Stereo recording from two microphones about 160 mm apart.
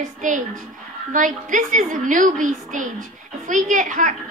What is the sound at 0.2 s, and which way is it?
A woman's voice, 55° right (ahead or behind).